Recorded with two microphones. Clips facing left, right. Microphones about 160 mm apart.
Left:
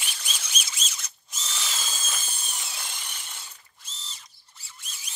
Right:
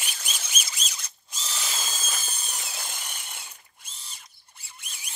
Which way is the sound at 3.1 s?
55° right (ahead or behind).